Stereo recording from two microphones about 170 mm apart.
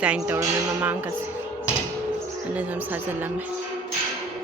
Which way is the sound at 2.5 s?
10° right (ahead or behind).